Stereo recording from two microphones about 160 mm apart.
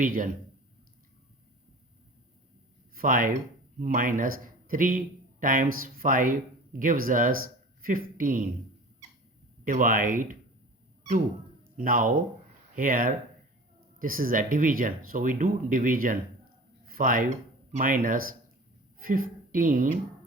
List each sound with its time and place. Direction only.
0.0 s speech: 55° right (ahead or behind)
2.9 s speech: 60° right (ahead or behind)
9.6 s speech: 60° right (ahead or behind)
11.8 s speech: 60° right (ahead or behind)
16.8 s a sound: 60° right (ahead or behind)
18.0 s a woman's voice: 60° right (ahead or behind)